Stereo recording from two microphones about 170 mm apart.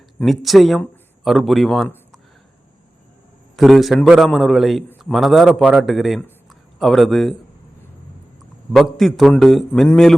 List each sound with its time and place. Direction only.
0.3 s a man's voice: centre (ahead or behind)
3.5 s a man's voice: centre (ahead or behind)
8.7 s a man's voice: centre (ahead or behind)